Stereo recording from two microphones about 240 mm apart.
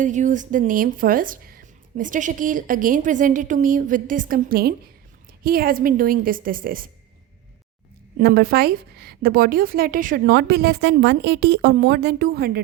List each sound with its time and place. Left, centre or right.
0.0 s speech: right
8.2 s speech: right